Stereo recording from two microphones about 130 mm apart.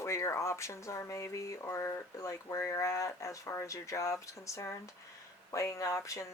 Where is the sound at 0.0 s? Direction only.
20° left (ahead or behind).